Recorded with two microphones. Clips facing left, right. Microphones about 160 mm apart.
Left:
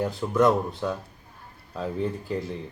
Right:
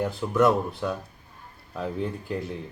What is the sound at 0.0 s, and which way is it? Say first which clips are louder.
Speech: even; 20° left (ahead or behind).